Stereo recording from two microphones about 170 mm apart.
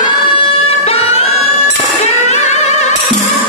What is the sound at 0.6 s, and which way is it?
Music, 35° left (ahead or behind).